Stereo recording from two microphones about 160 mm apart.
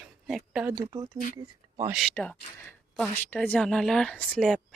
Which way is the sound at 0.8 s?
20° right (ahead or behind).